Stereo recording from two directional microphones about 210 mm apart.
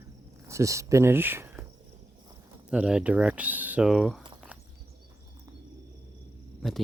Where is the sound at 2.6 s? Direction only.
5° right (ahead or behind).